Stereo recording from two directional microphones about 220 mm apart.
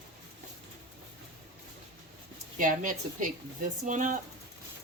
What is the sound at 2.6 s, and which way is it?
Speech, 35° right (ahead or behind).